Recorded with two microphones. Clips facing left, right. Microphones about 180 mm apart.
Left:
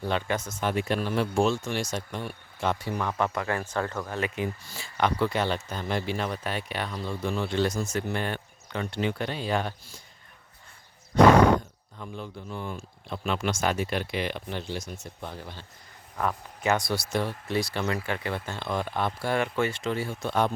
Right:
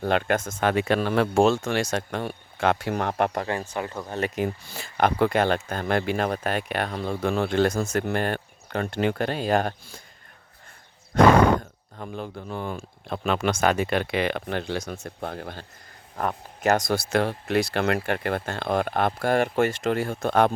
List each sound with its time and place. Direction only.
0.0 s speech: 60° right (ahead or behind)
0.6 s speech: 90° right
1.0 s speech: 75° right (ahead or behind)
2.6 s speech: 90° right; by 3.3 s 65° right (ahead or behind)
3.7 s speech: 15° right (ahead or behind)
4.7 s speech: 55° right (ahead or behind)
11.1 s speech: 55° right (ahead or behind); by 14.9 s 70° right (ahead or behind)
15.0 s speech: 55° right (ahead or behind)
16.1 s speech: 40° right (ahead or behind)
17.1 s speech: 75° right (ahead or behind)
17.7 s speech: 60° right (ahead or behind)